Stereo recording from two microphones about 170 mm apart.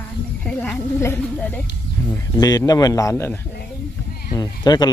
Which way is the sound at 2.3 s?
25° left (ahead or behind).